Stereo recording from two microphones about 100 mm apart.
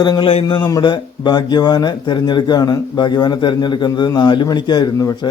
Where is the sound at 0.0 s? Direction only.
45° left (ahead or behind).